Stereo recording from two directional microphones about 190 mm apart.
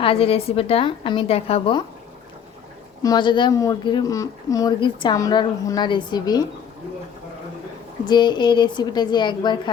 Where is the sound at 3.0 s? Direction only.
20° left (ahead or behind).